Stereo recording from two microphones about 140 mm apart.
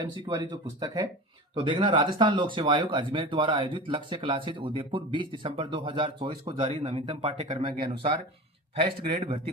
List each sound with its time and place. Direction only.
0.3 s speech: 30° right (ahead or behind)